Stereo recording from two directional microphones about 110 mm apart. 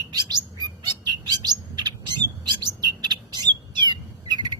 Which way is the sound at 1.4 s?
40° right (ahead or behind).